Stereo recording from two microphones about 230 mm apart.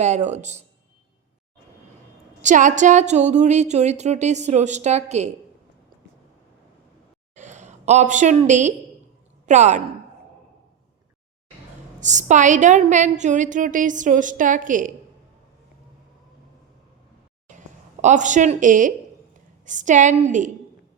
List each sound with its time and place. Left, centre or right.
0.0 s speech: right
2.4 s a woman's voice: right
7.3 s a woman's voice: right
11.9 s a woman's voice: right
17.5 s a sound: right
18.0 s a woman's voice: right